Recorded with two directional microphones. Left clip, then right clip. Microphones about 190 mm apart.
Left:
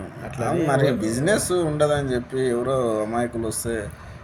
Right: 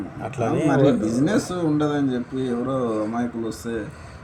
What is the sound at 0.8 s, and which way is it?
Speech, 60° left (ahead or behind).